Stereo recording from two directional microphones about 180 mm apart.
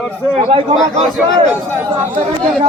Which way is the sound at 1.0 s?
Centre (ahead or behind).